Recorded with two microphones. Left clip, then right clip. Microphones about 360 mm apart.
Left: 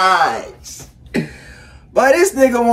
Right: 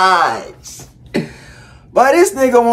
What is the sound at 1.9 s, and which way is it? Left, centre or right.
Speech, centre.